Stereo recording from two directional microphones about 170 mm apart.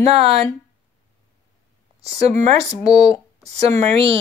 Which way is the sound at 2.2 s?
40° right (ahead or behind).